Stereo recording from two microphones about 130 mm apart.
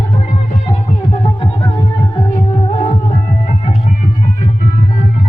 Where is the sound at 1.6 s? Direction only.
35° left (ahead or behind).